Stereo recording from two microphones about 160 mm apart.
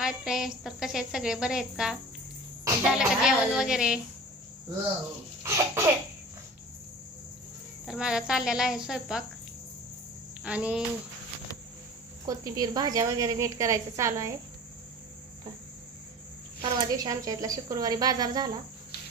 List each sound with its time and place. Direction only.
0.0 s speech: 5° right (ahead or behind)
3.0 s speech: 5° right (ahead or behind)
5.4 s cough: 15° right (ahead or behind)
7.9 s speech: 5° right (ahead or behind)
10.4 s speech: 5° right (ahead or behind)
12.2 s a woman's voice: 25° right (ahead or behind)
16.6 s a woman's voice: 25° right (ahead or behind)